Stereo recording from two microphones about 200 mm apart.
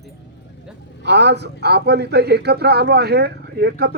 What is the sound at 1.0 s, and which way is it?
A man's voice, 60° right (ahead or behind).